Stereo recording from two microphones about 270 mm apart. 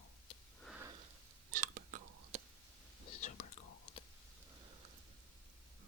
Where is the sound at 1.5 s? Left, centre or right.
Right.